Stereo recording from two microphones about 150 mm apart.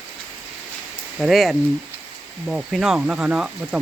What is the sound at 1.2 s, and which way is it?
Speech, centre (ahead or behind).